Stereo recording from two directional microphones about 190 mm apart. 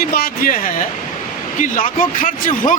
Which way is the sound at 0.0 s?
55° left (ahead or behind).